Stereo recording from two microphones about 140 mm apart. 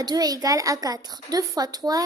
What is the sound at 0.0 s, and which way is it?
A woman's voice, 30° right (ahead or behind).